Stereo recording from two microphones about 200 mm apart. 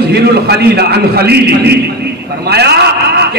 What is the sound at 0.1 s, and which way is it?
A man's voice, 55° right (ahead or behind).